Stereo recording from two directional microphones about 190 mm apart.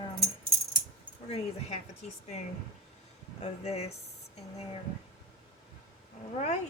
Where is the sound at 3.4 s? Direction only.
35° left (ahead or behind).